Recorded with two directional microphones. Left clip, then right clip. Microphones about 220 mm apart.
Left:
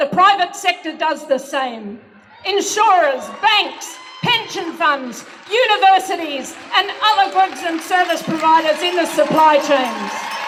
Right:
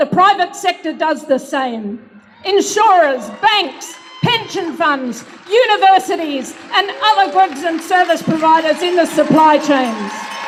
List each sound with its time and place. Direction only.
0.2 s a woman's voice: 25° right (ahead or behind)